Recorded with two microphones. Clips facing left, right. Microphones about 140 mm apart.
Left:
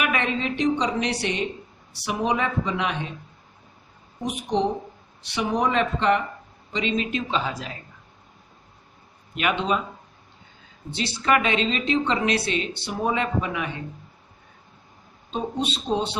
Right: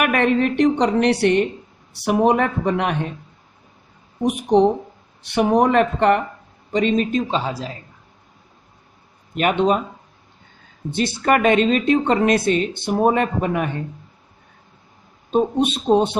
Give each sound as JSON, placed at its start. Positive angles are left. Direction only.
{"t": 0.0, "sound": "a woman's voice", "side_deg": -55}
{"t": 4.2, "sound": "a woman's voice", "side_deg": -55}
{"t": 9.3, "sound": "speech", "side_deg": -45}
{"t": 10.9, "sound": "speech", "side_deg": -50}
{"t": 15.3, "sound": "speech", "side_deg": -50}